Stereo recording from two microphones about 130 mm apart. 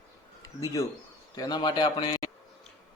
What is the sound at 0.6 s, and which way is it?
A man's voice, 25° left (ahead or behind).